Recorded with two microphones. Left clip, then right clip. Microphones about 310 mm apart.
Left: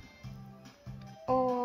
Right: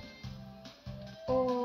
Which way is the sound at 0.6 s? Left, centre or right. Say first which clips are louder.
Right 4 dB; centre.